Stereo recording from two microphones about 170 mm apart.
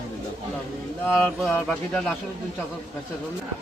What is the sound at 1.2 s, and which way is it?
Speech, 10° left (ahead or behind).